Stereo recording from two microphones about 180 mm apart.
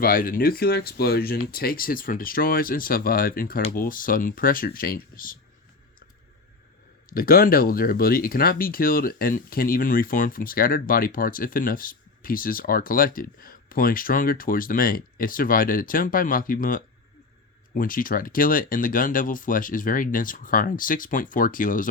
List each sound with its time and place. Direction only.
0.0 s speech: 50° left (ahead or behind)
7.1 s speech: 55° left (ahead or behind)